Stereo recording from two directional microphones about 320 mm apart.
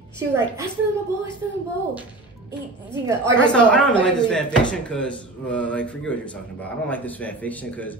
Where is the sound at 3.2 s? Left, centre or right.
Centre.